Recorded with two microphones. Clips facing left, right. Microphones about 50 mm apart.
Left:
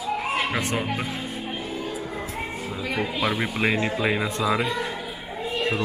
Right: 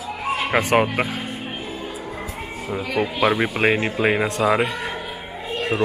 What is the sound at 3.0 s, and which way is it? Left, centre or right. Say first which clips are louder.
Speech: right 6 dB; right.